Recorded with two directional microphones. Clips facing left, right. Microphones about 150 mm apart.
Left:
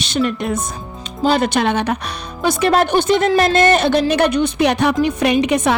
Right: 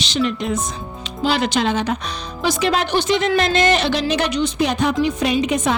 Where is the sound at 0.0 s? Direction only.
50° left (ahead or behind).